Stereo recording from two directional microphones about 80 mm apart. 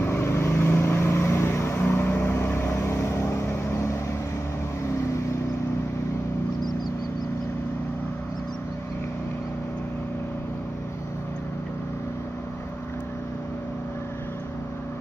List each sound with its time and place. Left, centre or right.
0.0 s vehicle: left